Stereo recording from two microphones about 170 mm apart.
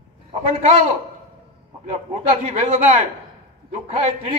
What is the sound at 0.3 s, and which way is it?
A man's voice, 40° right (ahead or behind).